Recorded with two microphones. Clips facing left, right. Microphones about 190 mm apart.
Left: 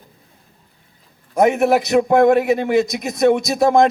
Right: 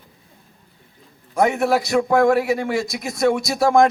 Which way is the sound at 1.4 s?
20° left (ahead or behind).